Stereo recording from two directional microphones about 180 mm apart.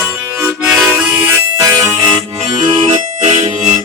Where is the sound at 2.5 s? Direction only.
35° right (ahead or behind).